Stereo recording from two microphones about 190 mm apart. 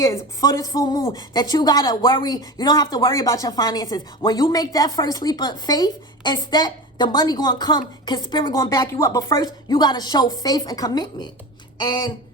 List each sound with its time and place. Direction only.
0.0 s speech: 15° left (ahead or behind)